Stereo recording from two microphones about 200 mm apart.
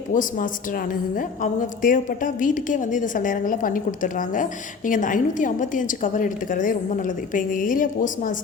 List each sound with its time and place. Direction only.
0.1 s a woman's voice: 40° left (ahead or behind)